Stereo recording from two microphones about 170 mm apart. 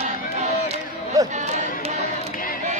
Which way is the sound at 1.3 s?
45° right (ahead or behind).